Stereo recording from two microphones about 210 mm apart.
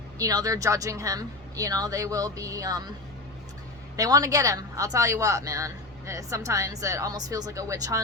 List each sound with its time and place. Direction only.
0.2 s speech: 15° right (ahead or behind)
3.9 s speech: 15° right (ahead or behind)